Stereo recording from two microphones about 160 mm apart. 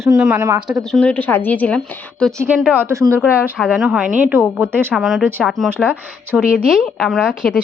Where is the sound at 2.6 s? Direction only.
15° right (ahead or behind).